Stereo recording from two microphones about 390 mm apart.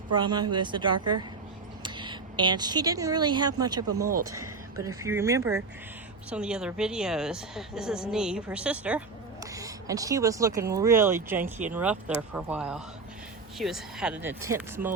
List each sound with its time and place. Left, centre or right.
0.2 s speech: centre
0.9 s speech: right
1.8 s a woman's voice: centre